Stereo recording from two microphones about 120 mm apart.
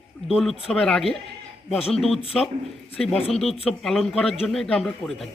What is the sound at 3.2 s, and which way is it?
Speech, 55° left (ahead or behind).